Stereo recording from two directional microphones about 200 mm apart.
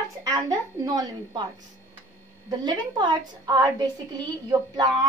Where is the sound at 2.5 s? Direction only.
20° right (ahead or behind).